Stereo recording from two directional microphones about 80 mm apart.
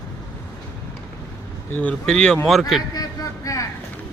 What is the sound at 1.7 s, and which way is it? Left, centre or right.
Speech, centre.